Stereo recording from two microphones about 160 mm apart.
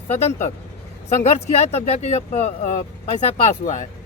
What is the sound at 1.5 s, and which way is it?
Speech, 40° left (ahead or behind).